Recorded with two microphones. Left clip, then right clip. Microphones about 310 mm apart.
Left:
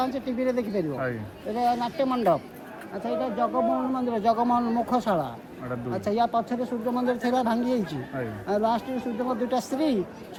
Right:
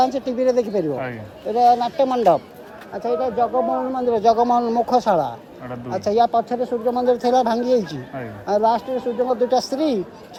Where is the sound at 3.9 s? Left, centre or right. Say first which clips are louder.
Right 8 dB; centre.